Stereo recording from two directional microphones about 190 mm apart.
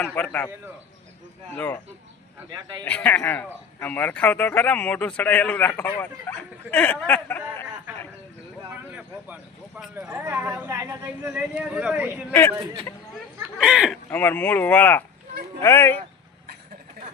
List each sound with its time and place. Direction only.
0.0 s a man's voice: 5° left (ahead or behind)
2.5 s a man's voice: 20° right (ahead or behind)
2.8 s a man's voice: 10° left (ahead or behind)
8.9 s speech: 10° right (ahead or behind)
12.3 s a man's voice: 10° left (ahead or behind)
13.4 s speech: 5° right (ahead or behind)
14.1 s a man's voice: 10° left (ahead or behind)